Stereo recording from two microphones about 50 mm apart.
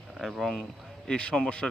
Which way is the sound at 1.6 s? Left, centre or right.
Centre.